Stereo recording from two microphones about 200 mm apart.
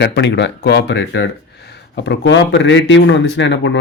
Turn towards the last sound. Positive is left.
turn(degrees=65)  # may be behind; listen again after turning